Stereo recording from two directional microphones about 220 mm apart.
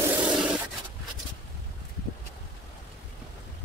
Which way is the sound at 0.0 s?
5° right (ahead or behind).